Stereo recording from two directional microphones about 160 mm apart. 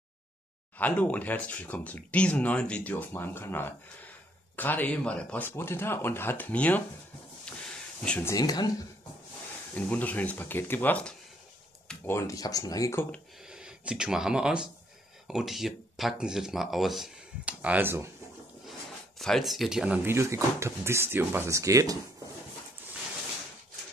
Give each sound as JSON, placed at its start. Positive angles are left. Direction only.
{"t": 0.7, "sound": "speech", "side_deg": 10}
{"t": 7.4, "sound": "a sound", "side_deg": 5}
{"t": 8.3, "sound": "speech", "side_deg": 25}
{"t": 9.8, "sound": "speech", "side_deg": 10}
{"t": 13.5, "sound": "speech", "side_deg": -5}
{"t": 18.7, "sound": "speech", "side_deg": 0}